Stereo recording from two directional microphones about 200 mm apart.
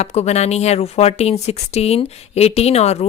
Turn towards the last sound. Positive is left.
turn(degrees=30)  # may be behind; listen again after turning